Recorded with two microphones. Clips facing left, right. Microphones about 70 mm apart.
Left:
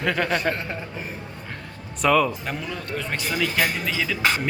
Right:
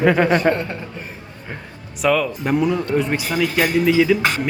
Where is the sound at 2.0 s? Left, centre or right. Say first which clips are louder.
Right 1 dB; centre.